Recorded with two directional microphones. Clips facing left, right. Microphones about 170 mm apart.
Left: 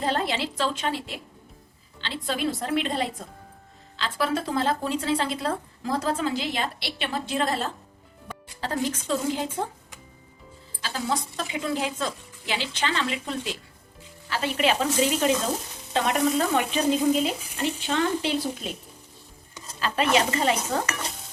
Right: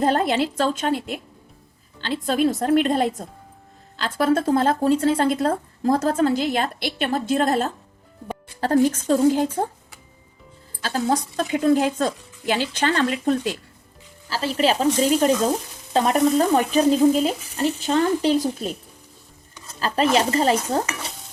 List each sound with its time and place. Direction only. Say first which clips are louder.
0.0 s speech: right 7 dB; 50° right (ahead or behind)
10.8 s speech: right 6 dB; 45° right (ahead or behind)
14.3 s speech: right 3 dB; 35° right (ahead or behind)
19.8 s speech: right 3 dB; 40° right (ahead or behind)